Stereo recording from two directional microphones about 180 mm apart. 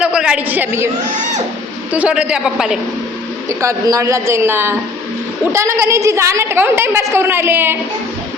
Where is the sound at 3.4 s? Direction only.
15° right (ahead or behind).